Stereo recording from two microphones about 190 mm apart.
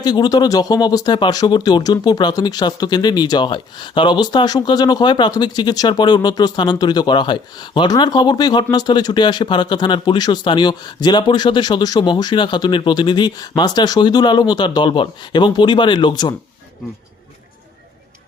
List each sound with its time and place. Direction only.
0.0 s speech: 20° left (ahead or behind)